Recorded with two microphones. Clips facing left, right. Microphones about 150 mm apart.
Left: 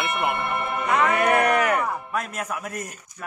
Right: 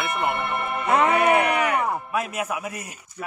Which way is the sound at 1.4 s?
45° left (ahead or behind).